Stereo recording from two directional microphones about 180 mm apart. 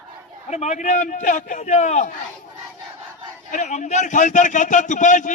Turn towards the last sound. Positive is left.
turn(degrees=45)  # may be behind; listen again after turning